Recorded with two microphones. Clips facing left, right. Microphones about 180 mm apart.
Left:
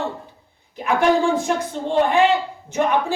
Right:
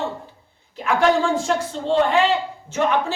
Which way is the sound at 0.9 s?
15° left (ahead or behind).